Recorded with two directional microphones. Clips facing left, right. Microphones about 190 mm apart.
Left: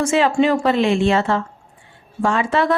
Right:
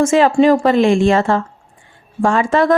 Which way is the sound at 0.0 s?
45° right (ahead or behind).